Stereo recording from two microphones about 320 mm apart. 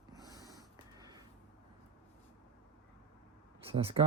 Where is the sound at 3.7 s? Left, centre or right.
Centre.